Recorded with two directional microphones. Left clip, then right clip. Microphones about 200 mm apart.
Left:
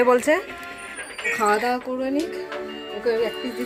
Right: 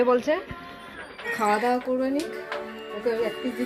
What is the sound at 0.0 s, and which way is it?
Speech, 15° left (ahead or behind).